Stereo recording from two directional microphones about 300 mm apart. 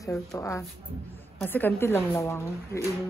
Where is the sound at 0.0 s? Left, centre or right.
Centre.